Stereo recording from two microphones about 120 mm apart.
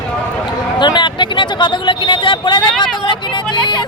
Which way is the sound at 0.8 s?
40° left (ahead or behind).